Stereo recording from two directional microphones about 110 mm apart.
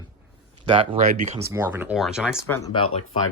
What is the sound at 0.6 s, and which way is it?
Speech, 50° right (ahead or behind).